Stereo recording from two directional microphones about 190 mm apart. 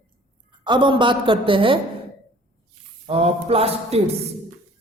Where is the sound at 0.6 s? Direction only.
25° right (ahead or behind).